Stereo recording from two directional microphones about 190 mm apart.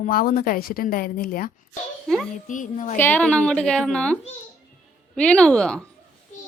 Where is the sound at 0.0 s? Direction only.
50° left (ahead or behind).